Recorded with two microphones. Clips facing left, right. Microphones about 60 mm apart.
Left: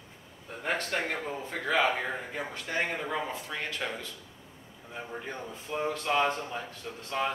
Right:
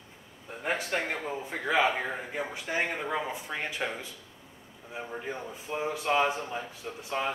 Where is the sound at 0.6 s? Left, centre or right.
Centre.